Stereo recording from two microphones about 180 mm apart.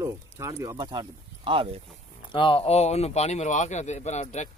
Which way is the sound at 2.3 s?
30° left (ahead or behind).